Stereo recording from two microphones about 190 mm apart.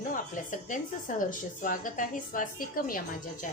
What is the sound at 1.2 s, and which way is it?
A woman's voice, 45° left (ahead or behind).